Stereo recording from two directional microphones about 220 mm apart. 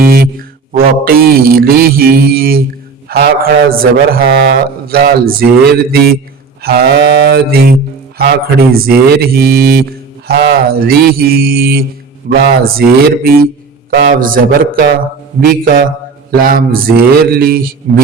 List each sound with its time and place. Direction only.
0.0 s mantra: 45° right (ahead or behind)
3.1 s a man's voice: 45° right (ahead or behind)
14.0 s mantra: 40° right (ahead or behind)
16.3 s mantra: 40° right (ahead or behind)